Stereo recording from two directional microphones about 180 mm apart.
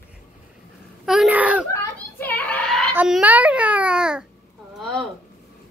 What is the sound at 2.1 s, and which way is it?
Child singing, 10° left (ahead or behind).